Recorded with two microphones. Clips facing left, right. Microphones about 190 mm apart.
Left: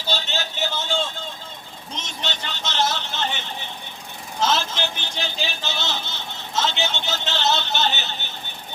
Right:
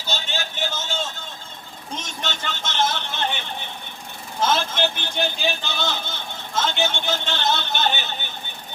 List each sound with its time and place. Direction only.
0.1 s a sound: 50° right (ahead or behind)
2.0 s vehicle: 50° right (ahead or behind)
4.4 s speech: 55° right (ahead or behind)